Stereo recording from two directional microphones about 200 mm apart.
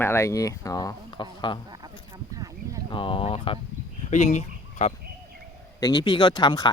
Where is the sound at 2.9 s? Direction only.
25° left (ahead or behind).